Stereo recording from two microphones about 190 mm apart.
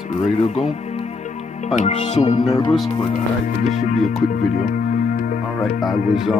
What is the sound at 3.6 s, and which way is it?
Speech, 40° left (ahead or behind).